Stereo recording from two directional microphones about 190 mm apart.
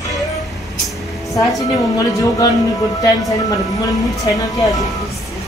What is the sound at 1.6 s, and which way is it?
Speech, 15° left (ahead or behind).